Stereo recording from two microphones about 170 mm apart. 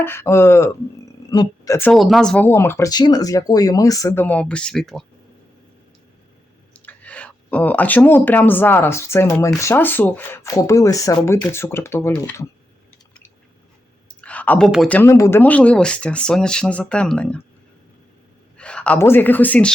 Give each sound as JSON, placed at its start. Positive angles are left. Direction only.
{"t": 0.0, "sound": "speech", "side_deg": 15}
{"t": 1.9, "sound": "speech", "side_deg": 0}
{"t": 6.7, "sound": "speech", "side_deg": 10}
{"t": 14.2, "sound": "clicking", "side_deg": 10}
{"t": 14.7, "sound": "speech", "side_deg": 5}
{"t": 18.5, "sound": "speech", "side_deg": 5}